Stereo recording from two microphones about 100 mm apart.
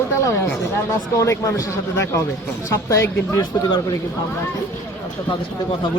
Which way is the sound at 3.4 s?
40° left (ahead or behind).